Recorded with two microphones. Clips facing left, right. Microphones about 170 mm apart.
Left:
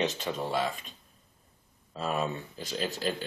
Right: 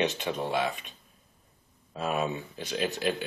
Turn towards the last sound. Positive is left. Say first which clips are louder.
# right 3 dB
turn(degrees=-10)  # may be behind; listen again after turning